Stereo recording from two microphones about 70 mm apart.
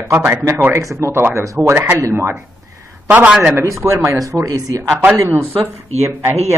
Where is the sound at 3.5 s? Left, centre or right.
Right.